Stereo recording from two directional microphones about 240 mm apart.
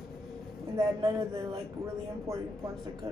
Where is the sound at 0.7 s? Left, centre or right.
Centre.